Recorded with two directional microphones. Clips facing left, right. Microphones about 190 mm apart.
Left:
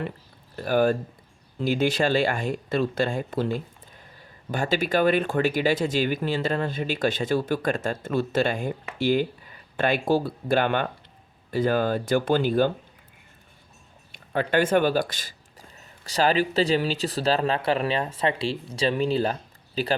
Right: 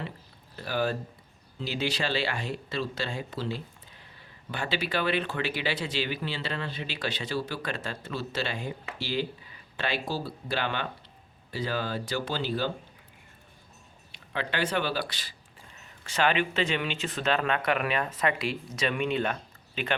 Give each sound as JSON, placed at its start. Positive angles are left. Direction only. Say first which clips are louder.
{"t": 0.5, "sound": "speech", "louder": "left 8 dB", "side_deg": 50}
{"t": 14.1, "sound": "speech", "louder": "left 9 dB", "side_deg": 50}